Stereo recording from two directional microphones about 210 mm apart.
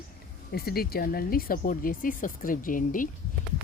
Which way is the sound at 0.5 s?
45° left (ahead or behind).